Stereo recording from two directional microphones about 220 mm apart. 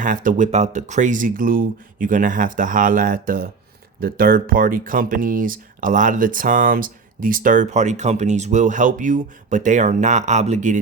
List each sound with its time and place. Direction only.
0.0 s speech: 35° right (ahead or behind)